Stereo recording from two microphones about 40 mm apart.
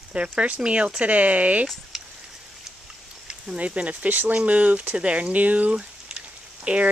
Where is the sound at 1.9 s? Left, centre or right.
Centre.